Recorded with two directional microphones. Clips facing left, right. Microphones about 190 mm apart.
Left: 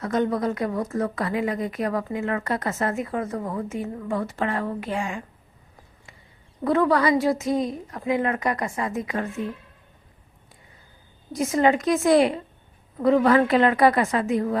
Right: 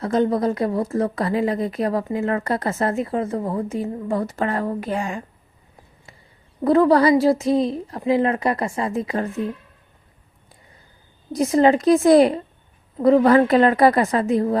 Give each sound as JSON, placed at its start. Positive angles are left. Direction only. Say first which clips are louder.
{"t": 0.0, "sound": "speech", "louder": "right 4 dB", "side_deg": -30}
{"t": 6.7, "sound": "speech", "louder": "right 5 dB", "side_deg": -35}
{"t": 11.3, "sound": "speech", "louder": "right 4 dB", "side_deg": -35}